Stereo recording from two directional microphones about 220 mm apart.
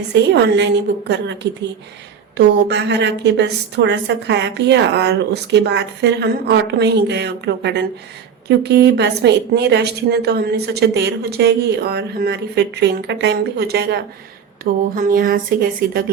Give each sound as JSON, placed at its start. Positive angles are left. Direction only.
{"t": 0.1, "sound": "a woman's voice", "side_deg": -50}
{"t": 2.4, "sound": "a woman's voice", "side_deg": -50}